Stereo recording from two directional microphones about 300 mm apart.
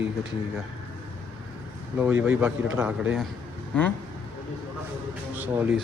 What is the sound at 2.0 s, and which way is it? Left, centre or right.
A man's voice, centre.